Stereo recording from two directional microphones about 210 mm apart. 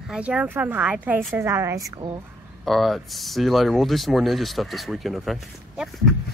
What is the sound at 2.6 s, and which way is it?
Speech, centre (ahead or behind).